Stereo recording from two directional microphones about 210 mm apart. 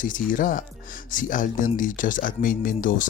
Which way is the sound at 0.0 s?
40° left (ahead or behind).